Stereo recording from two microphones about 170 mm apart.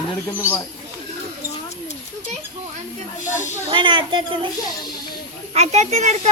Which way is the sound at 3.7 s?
30° right (ahead or behind).